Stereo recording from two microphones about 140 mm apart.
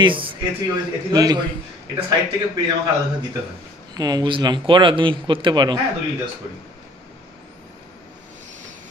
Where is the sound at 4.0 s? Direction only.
30° right (ahead or behind).